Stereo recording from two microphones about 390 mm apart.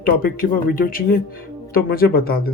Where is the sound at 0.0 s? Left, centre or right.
Left.